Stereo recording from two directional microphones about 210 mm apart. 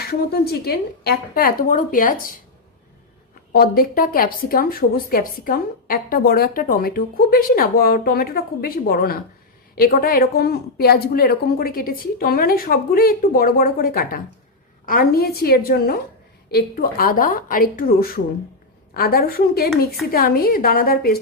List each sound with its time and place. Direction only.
0.0 s a woman's voice: 50° left (ahead or behind)
3.5 s a woman's voice: 45° left (ahead or behind)